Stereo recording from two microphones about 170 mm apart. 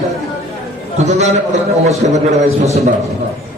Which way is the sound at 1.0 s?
40° right (ahead or behind).